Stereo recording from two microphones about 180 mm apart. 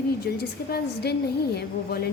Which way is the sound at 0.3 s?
65° left (ahead or behind).